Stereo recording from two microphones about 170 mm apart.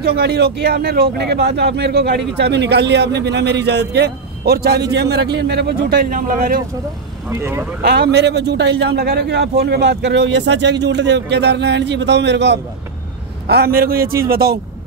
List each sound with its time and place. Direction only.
0.0 s a man's voice: 70° right (ahead or behind)
7.2 s speech: 15° right (ahead or behind)
7.8 s a man's voice: 75° right (ahead or behind); by 12.5 s 90° right
13.5 s a man's voice: 65° right (ahead or behind)